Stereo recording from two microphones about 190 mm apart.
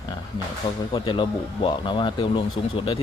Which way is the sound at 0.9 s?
25° left (ahead or behind).